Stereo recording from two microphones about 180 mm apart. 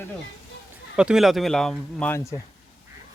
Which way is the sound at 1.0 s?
5° right (ahead or behind).